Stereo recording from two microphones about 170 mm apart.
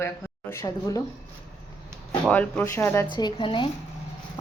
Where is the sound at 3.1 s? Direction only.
25° left (ahead or behind).